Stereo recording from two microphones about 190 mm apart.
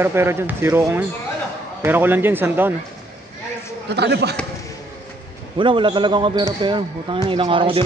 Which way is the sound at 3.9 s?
60° right (ahead or behind).